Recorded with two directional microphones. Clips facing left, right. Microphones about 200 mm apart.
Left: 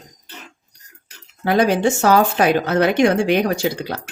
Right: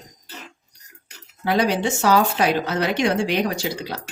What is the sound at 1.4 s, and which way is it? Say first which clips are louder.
Speech: left 4 dB; 50° left (ahead or behind).